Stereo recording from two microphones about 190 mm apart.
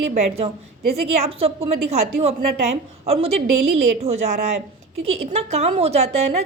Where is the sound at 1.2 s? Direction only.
30° right (ahead or behind).